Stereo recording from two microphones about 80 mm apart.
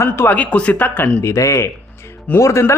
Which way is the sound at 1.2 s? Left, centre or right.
Left.